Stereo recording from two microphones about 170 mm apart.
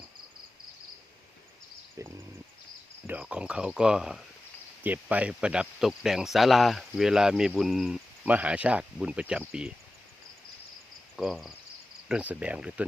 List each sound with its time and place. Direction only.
2.0 s a sound: 20° right (ahead or behind)
3.1 s speech: 5° right (ahead or behind)
11.2 s speech: centre (ahead or behind)
12.0 s cricket: 5° right (ahead or behind)